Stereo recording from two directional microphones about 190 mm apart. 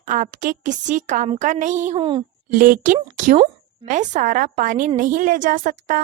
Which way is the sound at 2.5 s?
45° right (ahead or behind).